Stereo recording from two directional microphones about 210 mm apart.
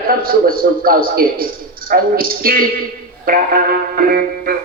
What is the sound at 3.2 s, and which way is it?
Music, 45° right (ahead or behind).